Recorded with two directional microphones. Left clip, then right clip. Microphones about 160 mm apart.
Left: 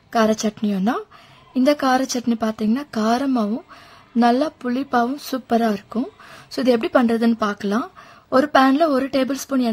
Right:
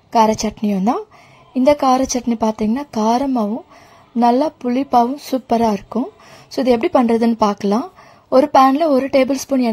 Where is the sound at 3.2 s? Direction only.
10° left (ahead or behind).